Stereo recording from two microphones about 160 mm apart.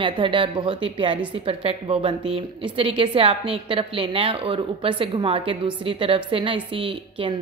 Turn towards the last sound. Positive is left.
turn(degrees=-35)  # may be behind; listen again after turning